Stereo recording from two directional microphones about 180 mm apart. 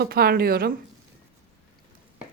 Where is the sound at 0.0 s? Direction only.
60° right (ahead or behind).